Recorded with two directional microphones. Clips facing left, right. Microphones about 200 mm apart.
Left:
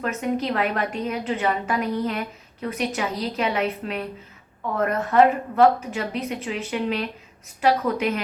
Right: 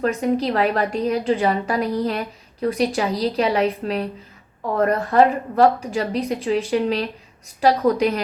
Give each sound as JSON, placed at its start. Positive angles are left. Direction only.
{"t": 0.0, "sound": "a woman's voice", "side_deg": -35}